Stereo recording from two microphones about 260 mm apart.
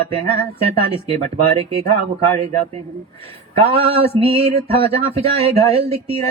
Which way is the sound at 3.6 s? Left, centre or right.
Right.